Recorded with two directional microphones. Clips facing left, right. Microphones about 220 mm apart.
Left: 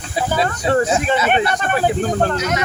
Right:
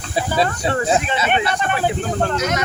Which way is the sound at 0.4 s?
45° left (ahead or behind).